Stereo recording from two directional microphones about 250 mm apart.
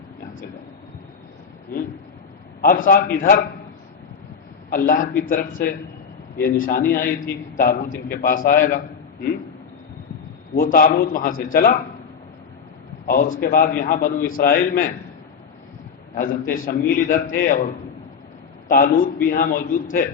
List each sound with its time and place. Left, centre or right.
2.6 s a man's voice: left
4.7 s a man's voice: left
10.6 s a man's voice: left
13.1 s a man's voice: left
16.1 s a man's voice: left
18.7 s a man's voice: left